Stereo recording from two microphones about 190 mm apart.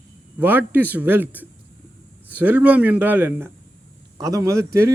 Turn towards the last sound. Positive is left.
turn(degrees=-15)  # may be behind; listen again after turning